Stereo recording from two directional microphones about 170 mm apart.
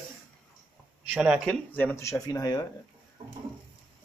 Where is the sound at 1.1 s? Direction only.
10° right (ahead or behind).